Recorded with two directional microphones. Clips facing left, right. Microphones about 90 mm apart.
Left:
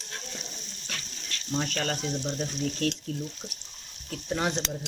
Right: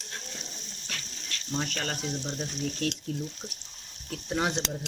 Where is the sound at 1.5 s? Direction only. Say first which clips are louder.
Left 3 dB; 15° right (ahead or behind).